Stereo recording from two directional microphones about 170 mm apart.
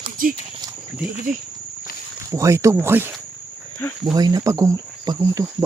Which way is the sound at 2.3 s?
20° right (ahead or behind).